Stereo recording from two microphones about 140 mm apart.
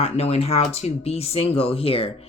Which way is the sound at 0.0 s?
45° left (ahead or behind).